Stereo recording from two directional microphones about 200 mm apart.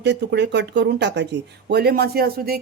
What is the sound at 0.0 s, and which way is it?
A woman's voice, 60° right (ahead or behind).